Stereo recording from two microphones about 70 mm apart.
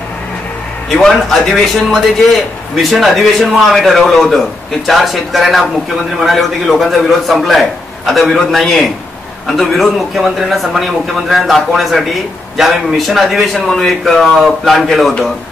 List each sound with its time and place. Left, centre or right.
0.9 s a man's voice: centre